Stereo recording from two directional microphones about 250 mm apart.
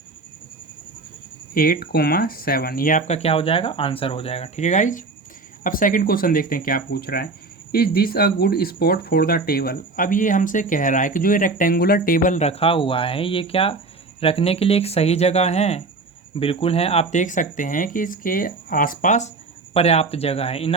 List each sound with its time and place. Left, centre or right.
1.5 s speech: left